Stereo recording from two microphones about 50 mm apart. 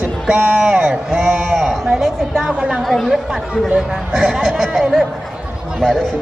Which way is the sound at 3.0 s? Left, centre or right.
Centre.